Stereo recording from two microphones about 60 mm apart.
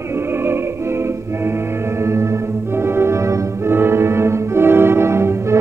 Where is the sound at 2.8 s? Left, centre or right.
Right.